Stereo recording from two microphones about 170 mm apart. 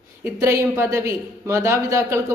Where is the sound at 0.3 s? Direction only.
15° right (ahead or behind).